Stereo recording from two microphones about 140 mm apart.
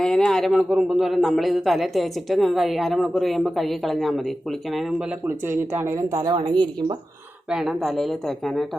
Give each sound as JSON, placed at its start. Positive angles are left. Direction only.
{"t": 0.0, "sound": "speech", "side_deg": 5}
{"t": 5.5, "sound": "speech", "side_deg": -15}
{"t": 6.1, "sound": "speech", "side_deg": -30}
{"t": 7.5, "sound": "speech", "side_deg": 0}